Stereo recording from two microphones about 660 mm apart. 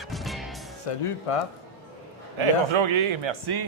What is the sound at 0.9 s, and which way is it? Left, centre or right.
Music, left.